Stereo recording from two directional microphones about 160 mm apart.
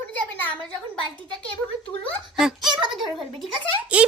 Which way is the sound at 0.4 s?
10° left (ahead or behind).